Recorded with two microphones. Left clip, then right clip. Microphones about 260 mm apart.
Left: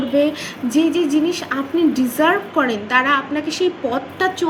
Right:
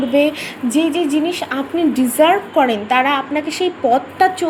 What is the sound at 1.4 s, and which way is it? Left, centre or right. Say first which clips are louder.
A woman's voice: even; centre.